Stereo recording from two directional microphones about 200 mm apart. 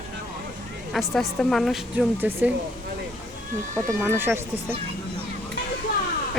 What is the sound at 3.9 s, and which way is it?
Speech, 10° right (ahead or behind).